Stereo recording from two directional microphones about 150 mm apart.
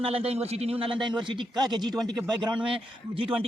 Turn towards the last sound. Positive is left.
turn(degrees=-35)  # may be behind; listen again after turning